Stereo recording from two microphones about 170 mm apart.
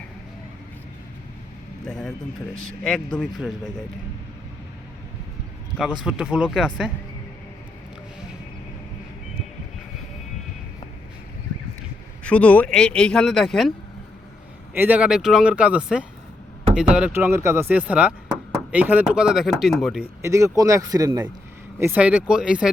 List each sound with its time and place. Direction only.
1.9 s speech: 5° left (ahead or behind)
5.7 s speech: centre (ahead or behind)
12.2 s speech: 5° left (ahead or behind)
14.7 s speech: 10° right (ahead or behind)
20.2 s speech: 15° right (ahead or behind)
21.8 s speech: 10° right (ahead or behind)